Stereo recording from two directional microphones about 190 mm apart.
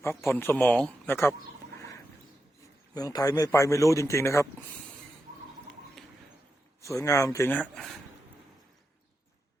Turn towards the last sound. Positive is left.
turn(degrees=0)  # may be behind; listen again after turning